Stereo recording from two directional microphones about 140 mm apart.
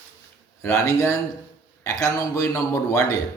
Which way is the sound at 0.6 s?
20° left (ahead or behind).